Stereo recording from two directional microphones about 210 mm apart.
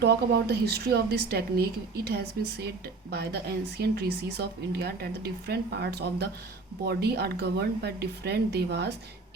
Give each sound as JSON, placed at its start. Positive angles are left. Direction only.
{"t": 0.0, "sound": "speech", "side_deg": -50}